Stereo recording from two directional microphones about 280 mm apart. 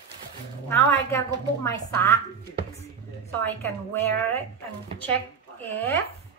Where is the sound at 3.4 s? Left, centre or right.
Centre.